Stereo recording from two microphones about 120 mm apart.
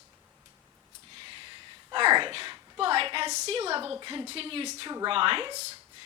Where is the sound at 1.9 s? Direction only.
45° right (ahead or behind).